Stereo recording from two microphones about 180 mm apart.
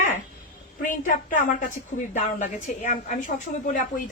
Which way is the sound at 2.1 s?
45° left (ahead or behind).